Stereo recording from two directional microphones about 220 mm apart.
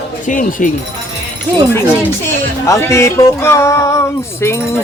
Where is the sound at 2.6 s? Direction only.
15° left (ahead or behind).